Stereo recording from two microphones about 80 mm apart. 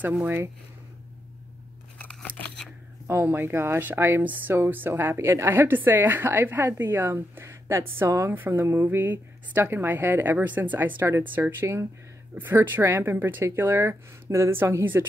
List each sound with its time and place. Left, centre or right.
0.0 s a woman's voice: right
2.0 s scissors: centre
3.1 s a woman's voice: right